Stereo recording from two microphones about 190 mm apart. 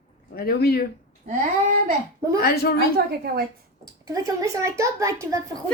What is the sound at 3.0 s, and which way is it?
Speech, 55° right (ahead or behind).